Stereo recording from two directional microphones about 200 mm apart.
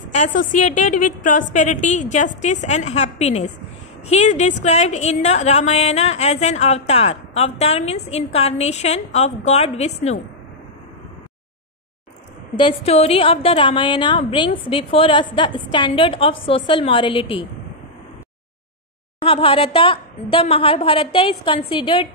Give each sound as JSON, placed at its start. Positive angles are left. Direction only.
{"t": 0.1, "sound": "a woman's voice", "side_deg": 40}
{"t": 12.5, "sound": "a woman's voice", "side_deg": 30}
{"t": 19.2, "sound": "a woman's voice", "side_deg": 25}